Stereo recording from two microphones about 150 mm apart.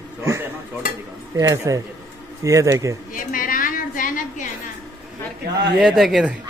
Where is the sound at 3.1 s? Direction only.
60° left (ahead or behind).